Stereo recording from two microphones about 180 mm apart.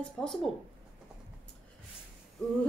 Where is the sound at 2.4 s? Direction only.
5° left (ahead or behind).